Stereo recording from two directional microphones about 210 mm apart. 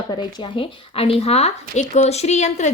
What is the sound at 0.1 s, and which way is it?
Speech, 20° left (ahead or behind).